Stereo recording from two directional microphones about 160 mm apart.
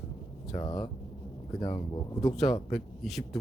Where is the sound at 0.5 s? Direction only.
25° left (ahead or behind).